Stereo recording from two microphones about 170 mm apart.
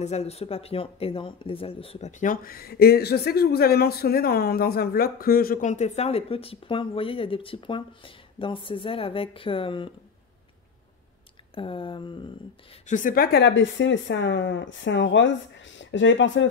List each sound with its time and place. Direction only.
0.0 s speech: 40° left (ahead or behind)
11.5 s speech: 30° left (ahead or behind)
12.8 s speech: 50° left (ahead or behind); by 16.4 s 90° left